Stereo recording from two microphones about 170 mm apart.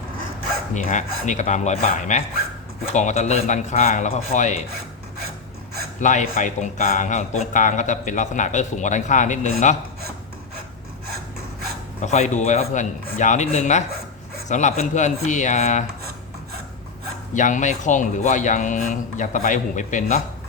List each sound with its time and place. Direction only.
0.7 s speech: 45° left (ahead or behind)
6.0 s speech: 45° left (ahead or behind)
12.0 s speech: 45° left (ahead or behind)
17.3 s speech: 45° left (ahead or behind)